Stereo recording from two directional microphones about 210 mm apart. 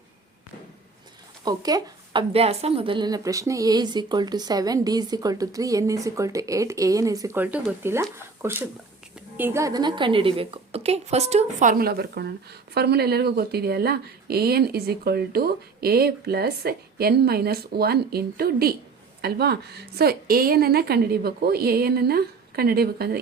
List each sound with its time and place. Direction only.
1.5 s a woman's voice: 20° right (ahead or behind); by 23.1 s 50° right (ahead or behind)